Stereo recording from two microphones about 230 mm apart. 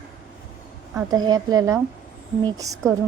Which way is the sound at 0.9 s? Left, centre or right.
Centre.